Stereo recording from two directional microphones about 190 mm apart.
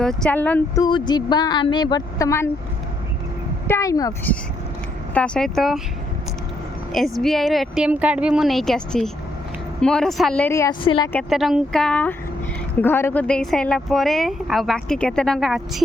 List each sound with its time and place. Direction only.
0.0 s a woman's voice: 5° left (ahead or behind)
0.8 s speech: 25° left (ahead or behind)
3.7 s a woman's voice: 15° left (ahead or behind)
5.1 s a woman's voice: 5° left (ahead or behind)
6.9 s a woman's voice: centre (ahead or behind); by 11.1 s 25° left (ahead or behind)
11.1 s a woman's voice: centre (ahead or behind)